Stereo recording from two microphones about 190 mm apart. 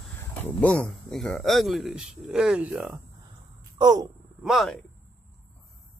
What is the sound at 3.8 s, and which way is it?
Speech, 20° right (ahead or behind).